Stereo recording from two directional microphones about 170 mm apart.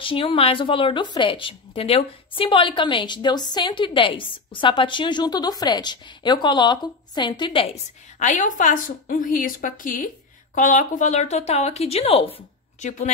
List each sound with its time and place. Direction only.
0.0 s a woman's voice: 30° left (ahead or behind)
8.2 s a woman's voice: 50° left (ahead or behind)